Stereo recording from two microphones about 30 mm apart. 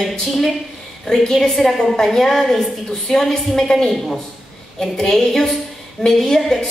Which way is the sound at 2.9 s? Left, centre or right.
Centre.